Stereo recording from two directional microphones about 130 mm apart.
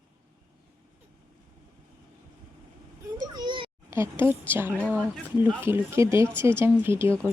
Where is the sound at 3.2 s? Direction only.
30° right (ahead or behind).